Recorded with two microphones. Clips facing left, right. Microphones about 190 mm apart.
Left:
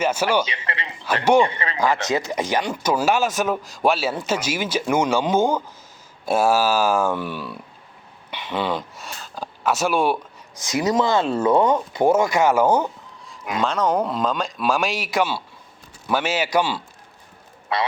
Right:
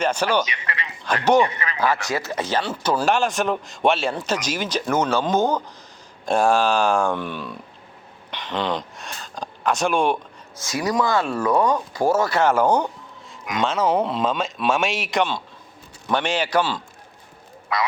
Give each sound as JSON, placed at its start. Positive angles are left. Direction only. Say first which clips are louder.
{"t": 0.0, "sound": "speech", "louder": "left 1 dB", "side_deg": 5}
{"t": 0.4, "sound": "a man's voice", "louder": "left 1 dB", "side_deg": 30}
{"t": 1.0, "sound": "a man's voice", "louder": "left 1 dB", "side_deg": 10}
{"t": 1.4, "sound": "speech", "louder": "left 1 dB", "side_deg": 30}
{"t": 1.8, "sound": "speech", "louder": "left 2 dB", "side_deg": 20}
{"t": 10.5, "sound": "speech", "louder": "left 3 dB", "side_deg": 20}
{"t": 17.7, "sound": "speech", "louder": "left 1 dB", "side_deg": 30}